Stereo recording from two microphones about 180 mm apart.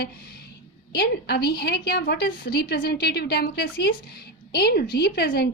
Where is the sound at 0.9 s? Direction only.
65° left (ahead or behind).